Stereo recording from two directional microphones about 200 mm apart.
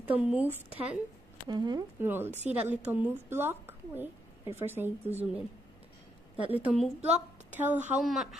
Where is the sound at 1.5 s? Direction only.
20° right (ahead or behind).